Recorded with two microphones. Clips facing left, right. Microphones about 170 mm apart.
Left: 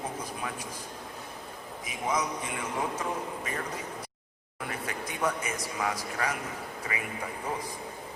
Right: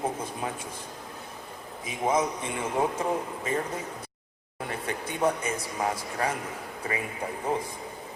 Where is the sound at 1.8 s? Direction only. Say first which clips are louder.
Right 5 dB; 25° right (ahead or behind).